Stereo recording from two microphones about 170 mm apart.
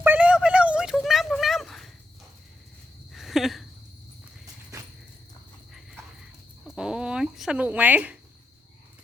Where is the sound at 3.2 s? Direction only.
Centre (ahead or behind).